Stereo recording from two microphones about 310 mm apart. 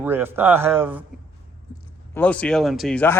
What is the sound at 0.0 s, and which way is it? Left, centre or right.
Speech, centre.